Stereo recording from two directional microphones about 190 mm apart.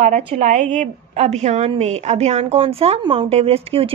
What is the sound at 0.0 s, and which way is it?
A woman's voice, 35° right (ahead or behind).